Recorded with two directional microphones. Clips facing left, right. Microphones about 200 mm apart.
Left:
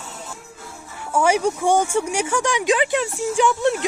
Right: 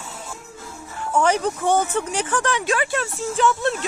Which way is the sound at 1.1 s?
10° left (ahead or behind).